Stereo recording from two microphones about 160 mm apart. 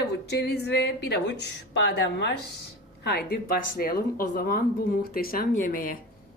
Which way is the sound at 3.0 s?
80° left.